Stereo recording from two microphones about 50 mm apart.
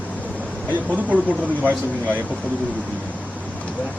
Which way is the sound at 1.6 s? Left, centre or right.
Right.